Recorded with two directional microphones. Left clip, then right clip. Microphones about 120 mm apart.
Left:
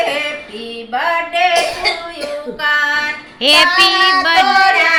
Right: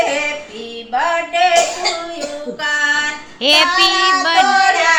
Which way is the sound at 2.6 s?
10° right (ahead or behind).